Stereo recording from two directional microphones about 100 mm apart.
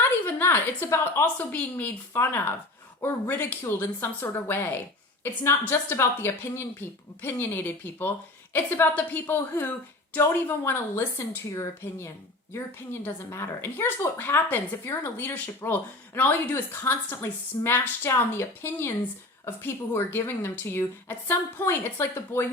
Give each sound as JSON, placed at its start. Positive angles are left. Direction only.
{"t": 0.3, "sound": "a woman's voice", "side_deg": 20}
{"t": 1.2, "sound": "a woman's voice", "side_deg": 15}